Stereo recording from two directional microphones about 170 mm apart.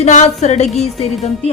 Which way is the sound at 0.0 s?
45° left (ahead or behind).